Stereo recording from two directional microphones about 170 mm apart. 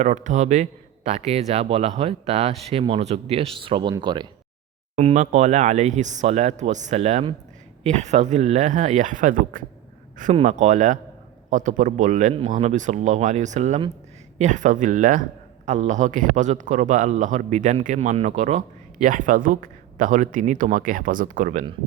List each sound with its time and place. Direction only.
0.0 s speech: 45° right (ahead or behind); by 4.3 s 25° right (ahead or behind)
4.9 s a man's voice: 45° right (ahead or behind)